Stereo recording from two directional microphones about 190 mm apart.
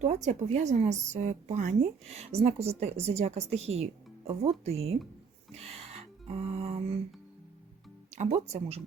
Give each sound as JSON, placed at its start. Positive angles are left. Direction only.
{"t": 0.0, "sound": "a woman's voice", "side_deg": -35}
{"t": 5.5, "sound": "music", "side_deg": -35}
{"t": 8.1, "sound": "a woman's voice", "side_deg": -35}